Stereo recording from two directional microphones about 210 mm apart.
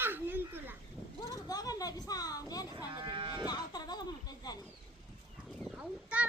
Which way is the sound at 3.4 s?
20° left (ahead or behind).